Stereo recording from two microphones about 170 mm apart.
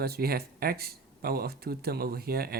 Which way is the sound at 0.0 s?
65° right (ahead or behind).